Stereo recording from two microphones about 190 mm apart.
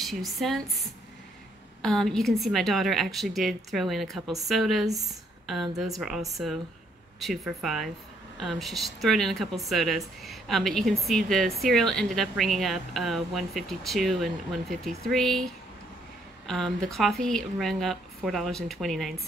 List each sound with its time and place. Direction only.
0.0 s speech: centre (ahead or behind)